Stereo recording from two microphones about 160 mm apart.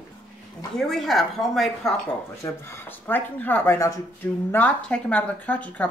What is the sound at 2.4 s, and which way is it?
Speech, 15° left (ahead or behind).